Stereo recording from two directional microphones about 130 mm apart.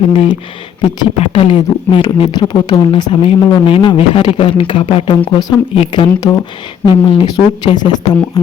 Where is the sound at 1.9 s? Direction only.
40° left (ahead or behind).